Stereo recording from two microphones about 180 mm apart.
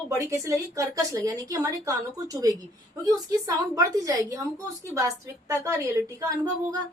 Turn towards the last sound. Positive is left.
turn(degrees=-20)  # may be behind; listen again after turning